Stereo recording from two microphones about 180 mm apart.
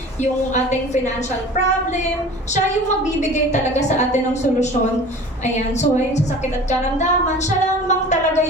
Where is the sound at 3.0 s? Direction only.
40° left (ahead or behind).